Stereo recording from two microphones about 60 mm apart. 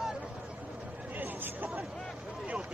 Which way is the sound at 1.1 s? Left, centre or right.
Right.